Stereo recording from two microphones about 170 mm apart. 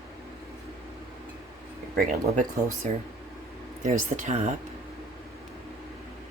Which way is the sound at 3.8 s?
45° right (ahead or behind).